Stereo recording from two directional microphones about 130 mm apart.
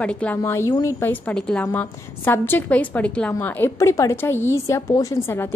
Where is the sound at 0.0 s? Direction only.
10° left (ahead or behind).